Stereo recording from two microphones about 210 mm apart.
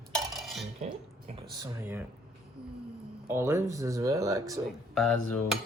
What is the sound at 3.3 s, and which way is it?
Speech, 10° right (ahead or behind).